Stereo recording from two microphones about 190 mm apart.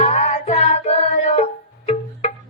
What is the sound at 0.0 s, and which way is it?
Music, 35° left (ahead or behind).